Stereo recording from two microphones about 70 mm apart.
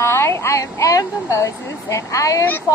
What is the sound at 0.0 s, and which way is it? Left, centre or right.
A woman's voice, left.